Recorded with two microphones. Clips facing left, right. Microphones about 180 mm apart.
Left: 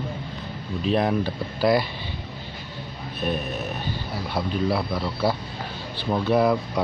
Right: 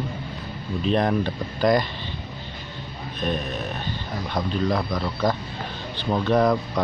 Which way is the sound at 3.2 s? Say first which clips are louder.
Even; 5° left (ahead or behind).